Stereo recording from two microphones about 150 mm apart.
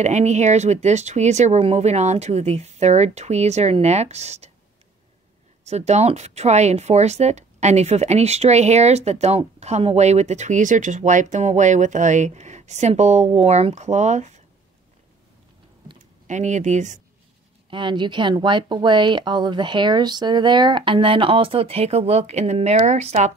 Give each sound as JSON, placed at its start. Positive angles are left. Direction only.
{"t": 0.0, "sound": "speech", "side_deg": -50}
{"t": 5.7, "sound": "speech", "side_deg": -45}
{"t": 16.3, "sound": "speech", "side_deg": -55}
{"t": 17.6, "sound": "speech", "side_deg": -35}